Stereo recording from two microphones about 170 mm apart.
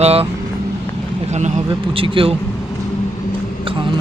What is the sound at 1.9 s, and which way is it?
Speech, 30° right (ahead or behind).